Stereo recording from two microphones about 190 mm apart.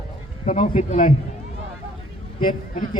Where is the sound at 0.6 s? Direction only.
30° left (ahead or behind).